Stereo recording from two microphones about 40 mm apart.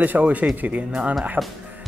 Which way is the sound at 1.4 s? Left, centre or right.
Centre.